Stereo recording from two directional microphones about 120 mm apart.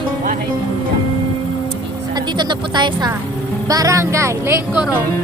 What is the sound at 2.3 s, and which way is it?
Speech, 40° right (ahead or behind).